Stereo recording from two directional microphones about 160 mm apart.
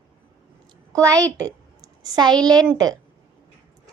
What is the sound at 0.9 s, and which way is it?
A woman's voice, 20° right (ahead or behind).